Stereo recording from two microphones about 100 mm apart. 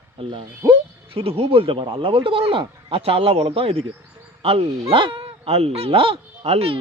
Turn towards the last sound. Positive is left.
turn(degrees=-80)